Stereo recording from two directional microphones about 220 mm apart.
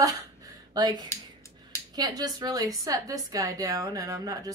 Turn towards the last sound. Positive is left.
turn(degrees=-15)  # may be behind; listen again after turning